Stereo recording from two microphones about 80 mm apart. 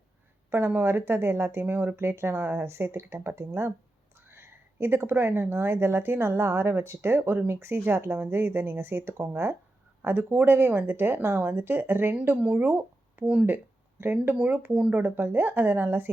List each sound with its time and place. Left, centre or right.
0.5 s speech: right
12.1 s speech: centre
14.0 s speech: right